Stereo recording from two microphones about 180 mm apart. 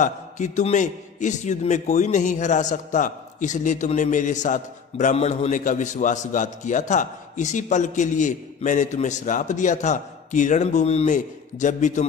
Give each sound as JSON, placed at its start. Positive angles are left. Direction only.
{"t": 0.0, "sound": "a man's voice", "side_deg": 40}